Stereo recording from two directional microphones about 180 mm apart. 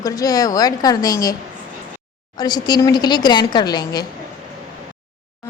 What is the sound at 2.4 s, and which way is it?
A woman's voice, 25° left (ahead or behind).